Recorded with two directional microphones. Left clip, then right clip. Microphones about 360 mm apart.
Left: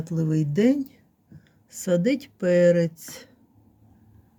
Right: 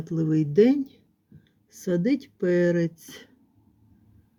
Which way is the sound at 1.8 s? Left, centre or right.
Centre.